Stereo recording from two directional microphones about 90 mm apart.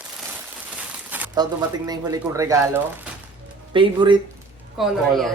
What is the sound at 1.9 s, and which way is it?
Speech, 40° right (ahead or behind).